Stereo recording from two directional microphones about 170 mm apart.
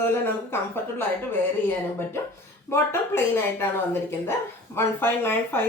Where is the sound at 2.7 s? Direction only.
15° left (ahead or behind).